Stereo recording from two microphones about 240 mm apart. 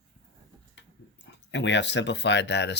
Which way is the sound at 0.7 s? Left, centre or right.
Left.